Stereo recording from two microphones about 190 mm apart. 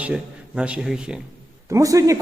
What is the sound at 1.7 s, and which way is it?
Speech, 15° right (ahead or behind).